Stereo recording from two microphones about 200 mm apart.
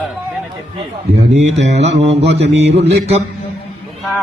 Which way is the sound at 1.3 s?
35° right (ahead or behind).